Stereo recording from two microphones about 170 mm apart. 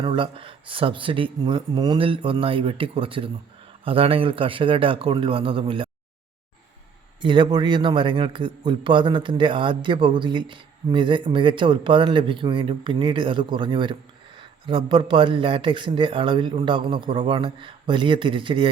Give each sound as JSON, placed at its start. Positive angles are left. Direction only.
{"t": 0.0, "sound": "speech", "side_deg": -30}
{"t": 7.2, "sound": "a man's voice", "side_deg": -30}